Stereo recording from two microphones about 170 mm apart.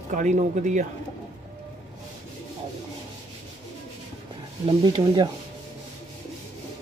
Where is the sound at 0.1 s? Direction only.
45° right (ahead or behind).